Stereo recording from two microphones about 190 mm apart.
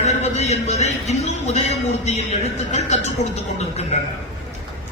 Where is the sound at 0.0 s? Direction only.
35° left (ahead or behind).